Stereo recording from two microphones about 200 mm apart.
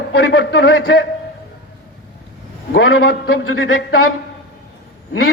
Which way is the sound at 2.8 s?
85° left.